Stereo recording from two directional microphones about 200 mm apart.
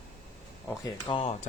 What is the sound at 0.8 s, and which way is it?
Speech, 25° left (ahead or behind).